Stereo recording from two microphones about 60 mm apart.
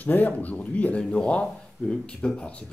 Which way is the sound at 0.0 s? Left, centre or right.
Left.